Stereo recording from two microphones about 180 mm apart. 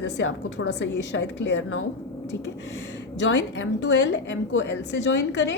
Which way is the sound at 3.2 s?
85° left.